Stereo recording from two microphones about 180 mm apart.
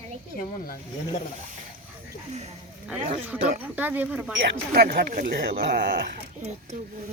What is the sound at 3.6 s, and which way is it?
Speech, 10° right (ahead or behind).